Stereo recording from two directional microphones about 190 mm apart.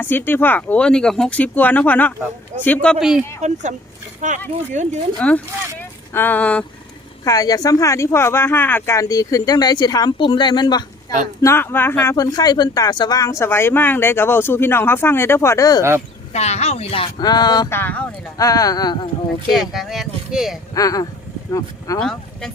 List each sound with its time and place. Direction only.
0.0 s speech: 10° left (ahead or behind)
3.4 s speech: 40° right (ahead or behind)
5.2 s speech: 5° left (ahead or behind)
7.3 s speech: 20° left (ahead or behind)
11.4 s speech: 10° left (ahead or behind)
16.3 s speech: 35° left (ahead or behind)
19.5 s speech: centre (ahead or behind)
20.7 s speech: 20° left (ahead or behind)
22.0 s speech: centre (ahead or behind)